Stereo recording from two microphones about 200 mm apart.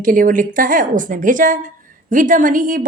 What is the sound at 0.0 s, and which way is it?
A woman's voice, 40° right (ahead or behind).